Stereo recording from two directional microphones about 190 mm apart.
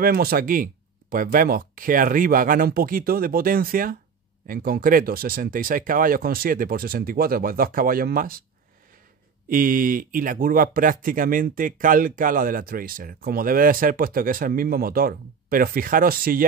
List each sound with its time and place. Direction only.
0.0 s speech: 50° right (ahead or behind)
9.5 s speech: 45° right (ahead or behind)